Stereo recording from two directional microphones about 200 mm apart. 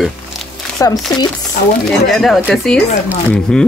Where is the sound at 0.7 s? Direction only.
15° left (ahead or behind).